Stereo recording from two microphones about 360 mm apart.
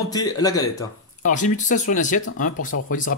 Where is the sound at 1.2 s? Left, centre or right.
Left.